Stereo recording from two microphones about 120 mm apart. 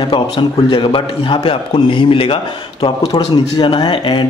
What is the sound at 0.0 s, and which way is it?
A man's voice, 40° left (ahead or behind).